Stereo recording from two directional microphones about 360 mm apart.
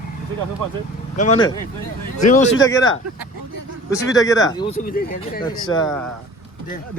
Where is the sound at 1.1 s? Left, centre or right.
Centre.